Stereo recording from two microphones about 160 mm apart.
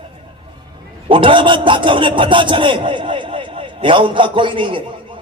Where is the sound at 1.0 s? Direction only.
30° right (ahead or behind).